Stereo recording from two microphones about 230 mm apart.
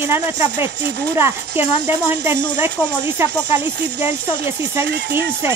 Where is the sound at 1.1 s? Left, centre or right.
Centre.